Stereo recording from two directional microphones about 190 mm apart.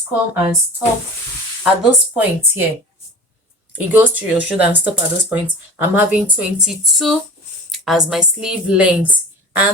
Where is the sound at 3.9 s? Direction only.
10° right (ahead or behind).